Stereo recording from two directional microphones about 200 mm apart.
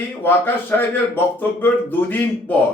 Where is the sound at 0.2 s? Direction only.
10° left (ahead or behind).